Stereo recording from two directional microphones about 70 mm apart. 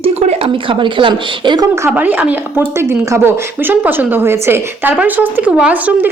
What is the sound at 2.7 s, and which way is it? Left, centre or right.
A woman's voice, right.